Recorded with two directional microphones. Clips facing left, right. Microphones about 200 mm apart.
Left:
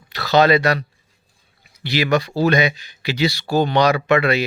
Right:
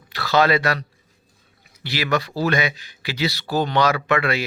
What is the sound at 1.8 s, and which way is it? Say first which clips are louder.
Speech: left 4 dB; 20° left (ahead or behind).